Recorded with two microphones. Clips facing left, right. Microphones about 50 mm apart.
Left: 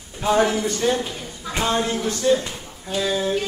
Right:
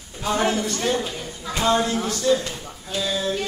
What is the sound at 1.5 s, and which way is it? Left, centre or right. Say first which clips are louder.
A man's voice: right 1 dB; left.